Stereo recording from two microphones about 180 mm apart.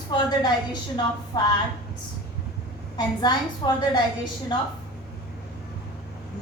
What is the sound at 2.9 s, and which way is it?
A woman's voice, 25° left (ahead or behind).